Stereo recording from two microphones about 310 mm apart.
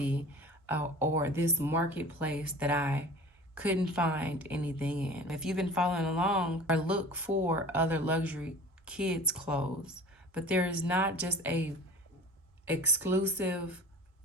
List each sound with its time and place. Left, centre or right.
0.0 s speech: centre